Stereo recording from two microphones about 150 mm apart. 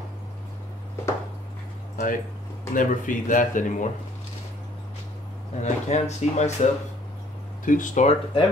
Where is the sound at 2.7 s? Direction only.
60° left (ahead or behind).